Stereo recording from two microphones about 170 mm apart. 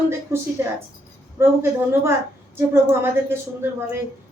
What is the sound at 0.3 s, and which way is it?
Speech, 15° right (ahead or behind).